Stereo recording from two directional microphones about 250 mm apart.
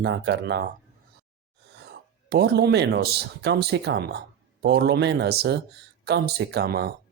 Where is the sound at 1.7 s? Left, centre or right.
Right.